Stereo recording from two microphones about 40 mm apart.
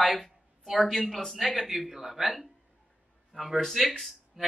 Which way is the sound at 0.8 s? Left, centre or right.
Centre.